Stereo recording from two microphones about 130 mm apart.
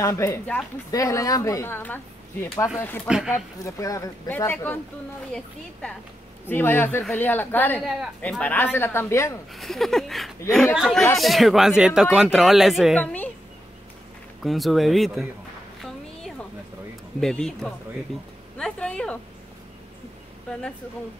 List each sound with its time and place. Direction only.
0.0 s a woman's voice: 20° left (ahead or behind)
3.1 s speech: 5° right (ahead or behind)
3.6 s a woman's voice: 25° left (ahead or behind)
4.3 s speech: 15° left (ahead or behind)
9.5 s speech: centre (ahead or behind)
14.4 s speech: centre (ahead or behind)
15.8 s a sound: centre (ahead or behind)
17.2 s speech: 5° left (ahead or behind)
18.6 s a sound: 5° left (ahead or behind)